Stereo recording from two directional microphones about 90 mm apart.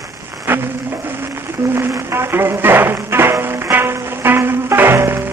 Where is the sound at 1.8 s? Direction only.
25° right (ahead or behind).